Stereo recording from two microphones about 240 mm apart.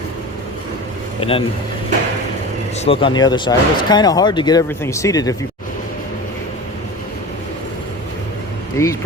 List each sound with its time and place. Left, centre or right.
1.2 s speech: left
2.8 s speech: left
8.8 s speech: centre